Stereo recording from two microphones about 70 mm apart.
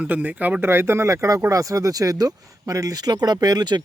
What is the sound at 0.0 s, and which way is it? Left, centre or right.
Speech, right.